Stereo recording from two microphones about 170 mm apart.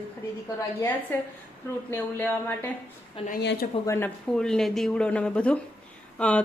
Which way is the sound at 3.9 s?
10° left (ahead or behind).